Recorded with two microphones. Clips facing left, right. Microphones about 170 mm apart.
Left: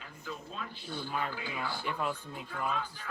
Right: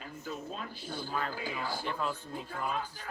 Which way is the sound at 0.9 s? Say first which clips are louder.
Even; 40° right (ahead or behind).